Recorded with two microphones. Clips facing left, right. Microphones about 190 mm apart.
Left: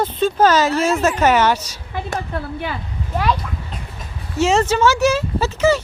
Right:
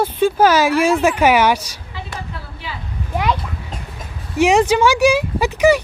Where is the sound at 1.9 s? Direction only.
55° left (ahead or behind).